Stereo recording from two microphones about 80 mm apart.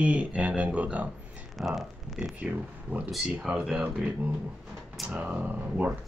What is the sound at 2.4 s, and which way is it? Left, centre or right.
Speech, centre.